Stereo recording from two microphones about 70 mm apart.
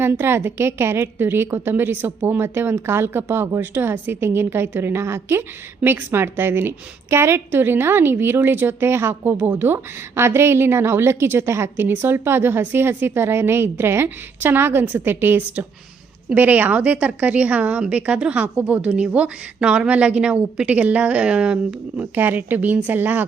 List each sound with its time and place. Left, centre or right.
0.0 s a woman's voice: right; by 22.0 s centre
22.1 s a woman's voice: right